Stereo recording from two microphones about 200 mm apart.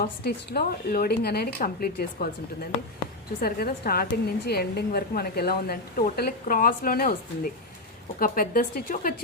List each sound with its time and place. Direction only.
0.0 s a woman's voice: 50° left (ahead or behind)